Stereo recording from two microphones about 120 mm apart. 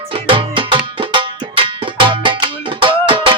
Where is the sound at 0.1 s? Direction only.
45° right (ahead or behind).